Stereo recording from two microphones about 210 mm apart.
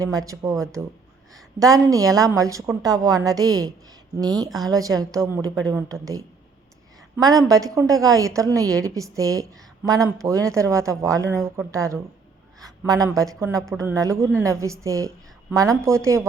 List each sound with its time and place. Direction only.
0.0 s a woman's voice: 15° right (ahead or behind)